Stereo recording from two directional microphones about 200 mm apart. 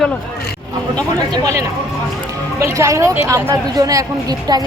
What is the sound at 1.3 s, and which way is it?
Speech, 20° right (ahead or behind).